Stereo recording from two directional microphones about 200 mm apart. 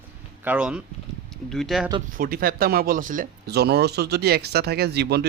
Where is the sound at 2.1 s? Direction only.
45° right (ahead or behind).